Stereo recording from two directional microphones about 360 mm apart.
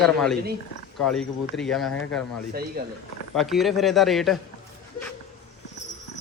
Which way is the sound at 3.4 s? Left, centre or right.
Centre.